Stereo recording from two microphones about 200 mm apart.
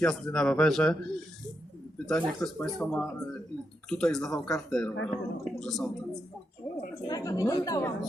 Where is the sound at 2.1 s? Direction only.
5° left (ahead or behind).